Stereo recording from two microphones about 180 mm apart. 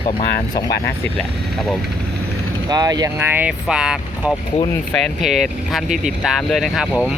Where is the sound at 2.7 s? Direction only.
20° right (ahead or behind); by 6.9 s centre (ahead or behind).